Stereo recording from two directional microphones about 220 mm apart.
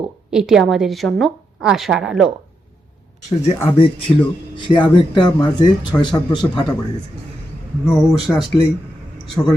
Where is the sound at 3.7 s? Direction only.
25° left (ahead or behind).